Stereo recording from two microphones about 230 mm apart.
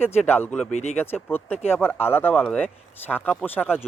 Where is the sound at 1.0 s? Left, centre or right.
Centre.